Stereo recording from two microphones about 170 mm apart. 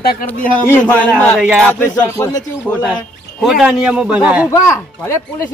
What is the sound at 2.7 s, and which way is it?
Speech, 10° left (ahead or behind).